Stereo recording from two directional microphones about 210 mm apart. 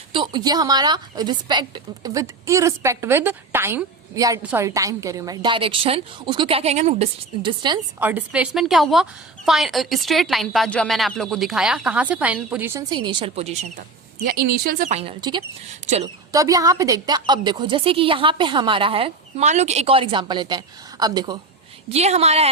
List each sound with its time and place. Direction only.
0.1 s a woman's voice: 20° right (ahead or behind)
7.9 s a woman's voice: 10° right (ahead or behind)
12.9 s a woman's voice: 20° right (ahead or behind)
14.3 s a woman's voice: 45° right (ahead or behind); by 21.3 s 20° right (ahead or behind)
21.8 s speech: 30° right (ahead or behind)